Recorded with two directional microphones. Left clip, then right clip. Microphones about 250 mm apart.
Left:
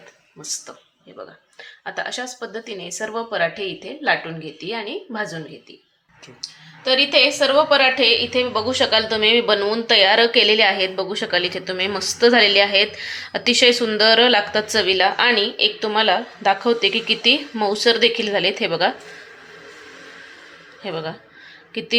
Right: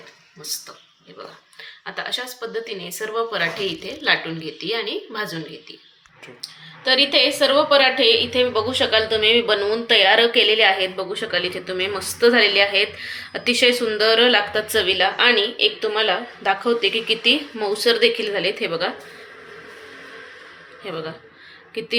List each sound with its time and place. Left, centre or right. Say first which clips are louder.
1.8 s a woman's voice: even; left
6.4 s a woman's voice: right 1 dB; left
20.8 s a woman's voice: left 2 dB; left